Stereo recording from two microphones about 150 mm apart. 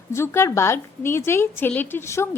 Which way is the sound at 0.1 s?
15° left (ahead or behind).